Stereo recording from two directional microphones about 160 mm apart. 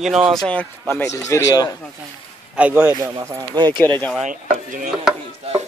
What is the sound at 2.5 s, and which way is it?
Speech, 10° right (ahead or behind).